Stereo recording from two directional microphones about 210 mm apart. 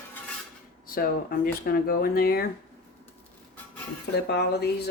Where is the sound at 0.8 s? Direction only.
45° left (ahead or behind).